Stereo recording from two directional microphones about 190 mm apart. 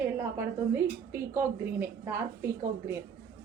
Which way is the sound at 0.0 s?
10° right (ahead or behind).